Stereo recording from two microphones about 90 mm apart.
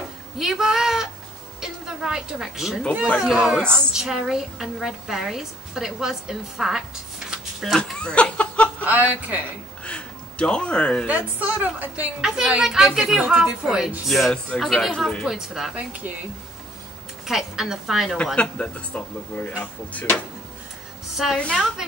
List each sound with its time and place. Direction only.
0.4 s a woman's voice: 5° right (ahead or behind)
7.2 s a sound: centre (ahead or behind)
8.0 s laughter: 10° left (ahead or behind)
8.8 s a woman's voice: 20° right (ahead or behind)
9.8 s a sound: 10° left (ahead or behind)
11.1 s a woman's voice: 20° right (ahead or behind)
12.2 s a woman's voice: 5° right (ahead or behind)
15.7 s a woman's voice: 15° right (ahead or behind)
17.3 s a woman's voice: 5° right (ahead or behind)
18.1 s speech: 15° left (ahead or behind)
21.1 s a woman's voice: 5° right (ahead or behind)
21.4 s speech: 10° left (ahead or behind)